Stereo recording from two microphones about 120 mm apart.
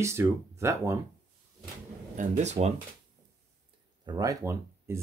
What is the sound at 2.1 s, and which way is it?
Speech, 80° right.